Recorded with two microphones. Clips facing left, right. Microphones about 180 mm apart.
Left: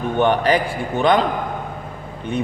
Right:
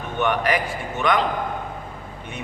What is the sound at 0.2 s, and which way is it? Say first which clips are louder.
A man's voice: left 5 dB; 30° left (ahead or behind).